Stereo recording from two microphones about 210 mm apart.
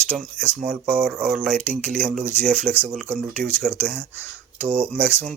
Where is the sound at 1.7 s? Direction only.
40° right (ahead or behind).